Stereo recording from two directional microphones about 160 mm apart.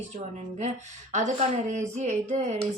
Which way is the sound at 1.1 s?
50° right (ahead or behind).